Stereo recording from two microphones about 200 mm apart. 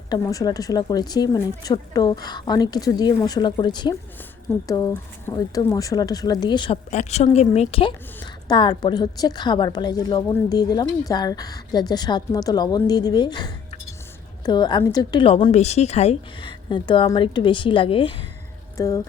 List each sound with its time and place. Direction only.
0.1 s a woman's voice: 20° left (ahead or behind)
6.9 s a woman's voice: 35° left (ahead or behind)
18.8 s music: 15° left (ahead or behind)